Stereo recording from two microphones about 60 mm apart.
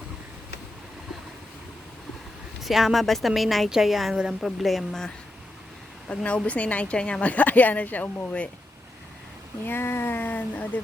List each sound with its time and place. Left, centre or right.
2.6 s speech: centre
6.1 s a woman's voice: left
9.6 s speech: left